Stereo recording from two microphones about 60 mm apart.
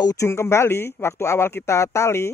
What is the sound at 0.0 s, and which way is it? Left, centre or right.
Speech, left.